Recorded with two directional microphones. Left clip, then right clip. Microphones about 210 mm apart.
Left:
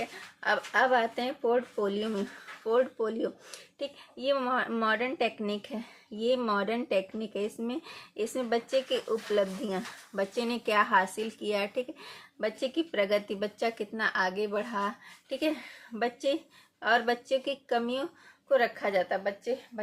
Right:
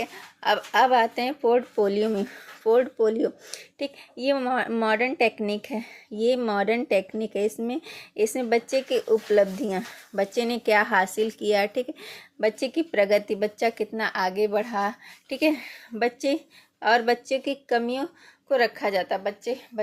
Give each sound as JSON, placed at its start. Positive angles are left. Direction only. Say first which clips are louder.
{"t": 0.0, "sound": "a woman's voice", "louder": "right 5 dB", "side_deg": -35}